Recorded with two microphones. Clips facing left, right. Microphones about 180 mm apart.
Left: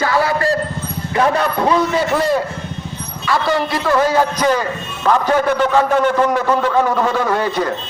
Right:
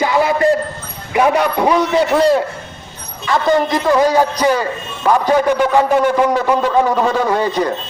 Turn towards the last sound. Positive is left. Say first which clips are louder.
# right 2 dB
turn(degrees=-15)  # may be behind; listen again after turning